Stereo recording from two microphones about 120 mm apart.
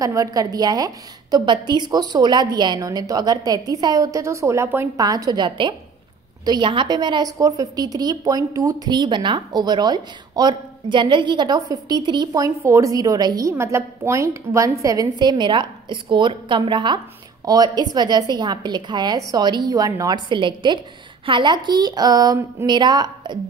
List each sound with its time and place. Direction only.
0.0 s a woman's voice: 30° right (ahead or behind)